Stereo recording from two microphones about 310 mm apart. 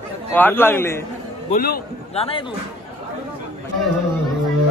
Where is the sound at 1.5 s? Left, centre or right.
Left.